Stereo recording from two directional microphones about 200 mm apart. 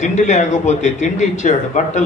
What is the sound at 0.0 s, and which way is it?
Speech, 35° left (ahead or behind).